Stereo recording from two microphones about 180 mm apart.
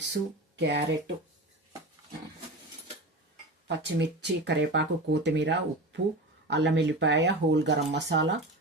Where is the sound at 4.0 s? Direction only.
75° right (ahead or behind).